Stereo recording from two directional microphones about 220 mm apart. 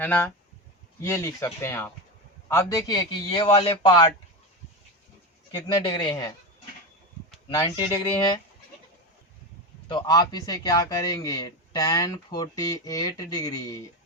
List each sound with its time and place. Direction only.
0.0 s a man's voice: 5° left (ahead or behind)
5.5 s a man's voice: 20° left (ahead or behind)
7.5 s a man's voice: 15° left (ahead or behind)
9.9 s a man's voice: 20° left (ahead or behind)